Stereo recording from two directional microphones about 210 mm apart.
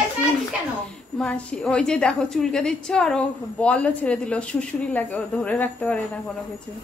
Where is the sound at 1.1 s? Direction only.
5° left (ahead or behind).